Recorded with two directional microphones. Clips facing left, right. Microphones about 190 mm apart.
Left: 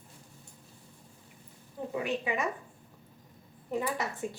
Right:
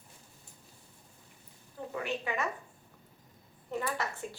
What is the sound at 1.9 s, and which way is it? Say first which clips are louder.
Speech: left 3 dB; 15° left (ahead or behind).